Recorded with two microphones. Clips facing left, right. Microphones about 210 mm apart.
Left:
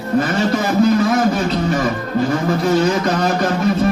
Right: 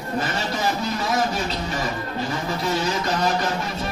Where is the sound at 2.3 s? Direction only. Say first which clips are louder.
Left 8 dB; 50° left (ahead or behind).